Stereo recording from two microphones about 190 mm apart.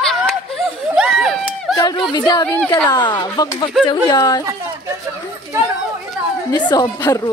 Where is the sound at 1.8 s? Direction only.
20° left (ahead or behind).